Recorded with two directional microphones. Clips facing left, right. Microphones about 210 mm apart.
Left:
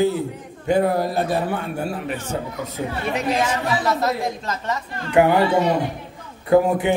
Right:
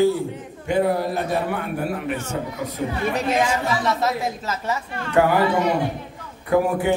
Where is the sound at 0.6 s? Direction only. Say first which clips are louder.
Left 2 dB; 40° left (ahead or behind).